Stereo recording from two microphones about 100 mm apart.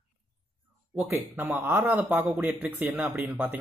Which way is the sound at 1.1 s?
20° right (ahead or behind).